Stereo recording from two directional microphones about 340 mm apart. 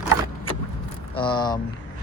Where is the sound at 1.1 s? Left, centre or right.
Centre.